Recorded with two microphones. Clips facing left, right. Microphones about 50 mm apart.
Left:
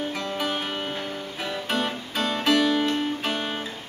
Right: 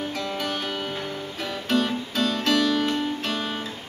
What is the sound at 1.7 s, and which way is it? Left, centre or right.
Music, centre.